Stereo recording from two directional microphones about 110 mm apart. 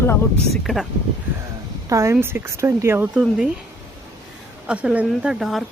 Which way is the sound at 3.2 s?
10° right (ahead or behind).